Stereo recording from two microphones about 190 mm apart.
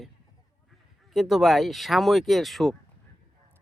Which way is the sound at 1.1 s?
Centre (ahead or behind).